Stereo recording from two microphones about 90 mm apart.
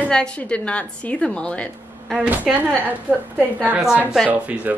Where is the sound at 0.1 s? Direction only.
10° left (ahead or behind).